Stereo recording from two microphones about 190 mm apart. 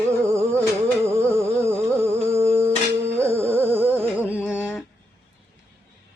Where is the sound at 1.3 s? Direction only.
15° right (ahead or behind).